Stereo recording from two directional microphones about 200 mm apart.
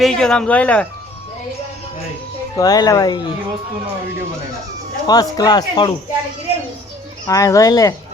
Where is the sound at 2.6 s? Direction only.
20° left (ahead or behind).